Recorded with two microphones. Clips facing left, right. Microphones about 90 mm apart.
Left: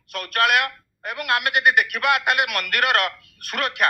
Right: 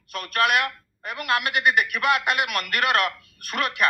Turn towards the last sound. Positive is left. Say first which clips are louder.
# left 1 dB
turn(degrees=70)  # may be behind; listen again after turning